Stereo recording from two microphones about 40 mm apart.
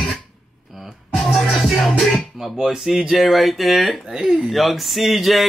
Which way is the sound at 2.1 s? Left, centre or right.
Centre.